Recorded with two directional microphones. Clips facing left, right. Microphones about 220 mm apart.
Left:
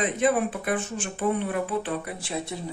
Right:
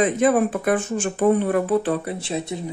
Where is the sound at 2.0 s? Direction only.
25° right (ahead or behind).